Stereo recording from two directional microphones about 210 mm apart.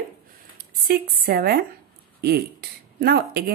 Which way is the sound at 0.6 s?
45° right (ahead or behind).